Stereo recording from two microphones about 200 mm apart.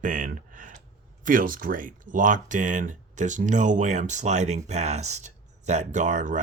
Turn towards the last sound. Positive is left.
turn(degrees=-40)  # may be behind; listen again after turning